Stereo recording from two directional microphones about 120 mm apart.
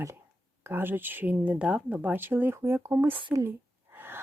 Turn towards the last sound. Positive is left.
turn(degrees=-20)  # may be behind; listen again after turning